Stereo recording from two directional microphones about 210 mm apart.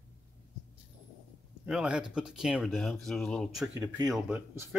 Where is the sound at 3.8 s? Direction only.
15° right (ahead or behind).